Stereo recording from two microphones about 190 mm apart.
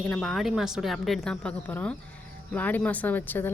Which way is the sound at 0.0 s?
Centre (ahead or behind).